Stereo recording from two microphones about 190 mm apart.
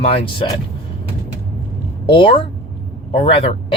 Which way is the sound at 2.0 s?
25° left (ahead or behind).